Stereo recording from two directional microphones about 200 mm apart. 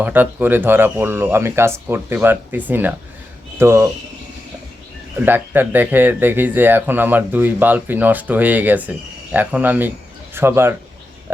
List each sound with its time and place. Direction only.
0.0 s speech: 10° right (ahead or behind)
5.2 s speech: 10° right (ahead or behind)